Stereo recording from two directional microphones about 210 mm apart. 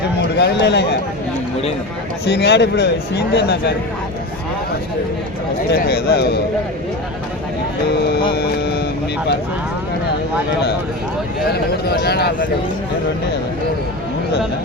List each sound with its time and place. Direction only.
0.2 s a man's voice: 55° left (ahead or behind)
2.2 s a man's voice: 50° left (ahead or behind)
5.7 s a man's voice: 50° left (ahead or behind)
8.3 s a man's voice: 50° left (ahead or behind)
12.0 s a man's voice: 50° left (ahead or behind)